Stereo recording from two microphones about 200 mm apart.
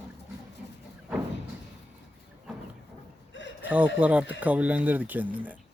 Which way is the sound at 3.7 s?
10° right (ahead or behind).